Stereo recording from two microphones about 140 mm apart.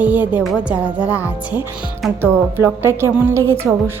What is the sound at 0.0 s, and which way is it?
A woman's voice, 10° right (ahead or behind).